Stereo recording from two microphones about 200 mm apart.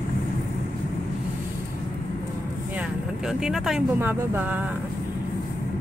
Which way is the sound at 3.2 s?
Centre (ahead or behind).